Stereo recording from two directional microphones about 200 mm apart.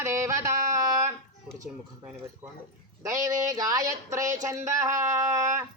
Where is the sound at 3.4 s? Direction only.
15° right (ahead or behind).